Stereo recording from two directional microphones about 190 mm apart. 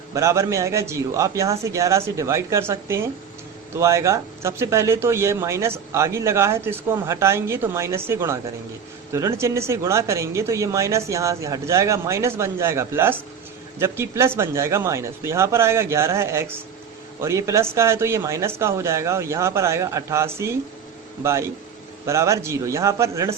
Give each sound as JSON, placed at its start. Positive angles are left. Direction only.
{"t": 0.1, "sound": "speech", "side_deg": -15}
{"t": 22.0, "sound": "speech", "side_deg": -15}